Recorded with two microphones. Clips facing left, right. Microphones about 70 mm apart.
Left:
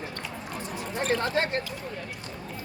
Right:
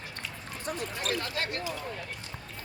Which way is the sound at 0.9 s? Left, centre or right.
Left.